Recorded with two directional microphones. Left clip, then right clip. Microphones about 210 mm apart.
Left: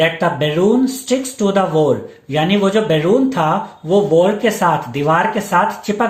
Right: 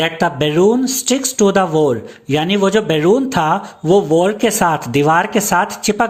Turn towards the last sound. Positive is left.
turn(degrees=-50)  # may be behind; listen again after turning